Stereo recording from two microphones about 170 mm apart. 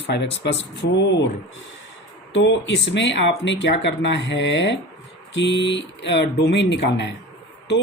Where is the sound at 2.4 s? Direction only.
90° left.